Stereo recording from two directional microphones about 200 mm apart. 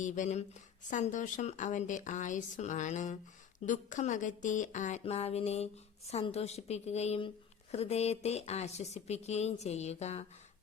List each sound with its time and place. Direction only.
0.0 s speech: 35° left (ahead or behind)